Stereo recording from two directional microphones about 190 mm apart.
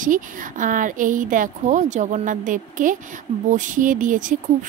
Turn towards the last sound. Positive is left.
turn(degrees=-40)  # may be behind; listen again after turning